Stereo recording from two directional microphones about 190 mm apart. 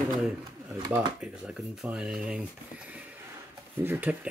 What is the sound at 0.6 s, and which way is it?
Speech, 20° right (ahead or behind).